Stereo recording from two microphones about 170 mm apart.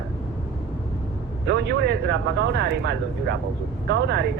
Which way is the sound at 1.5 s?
85° right.